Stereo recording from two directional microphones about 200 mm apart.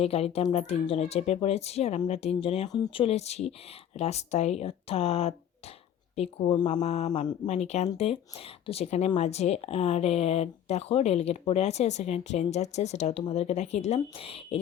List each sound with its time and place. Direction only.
0.0 s speech: 30° left (ahead or behind)